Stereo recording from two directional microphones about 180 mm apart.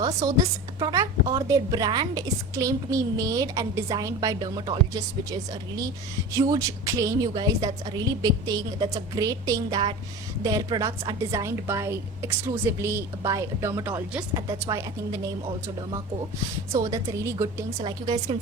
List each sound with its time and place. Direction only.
0.0 s a woman's voice: 20° right (ahead or behind)
16.7 s a woman's voice: 20° right (ahead or behind)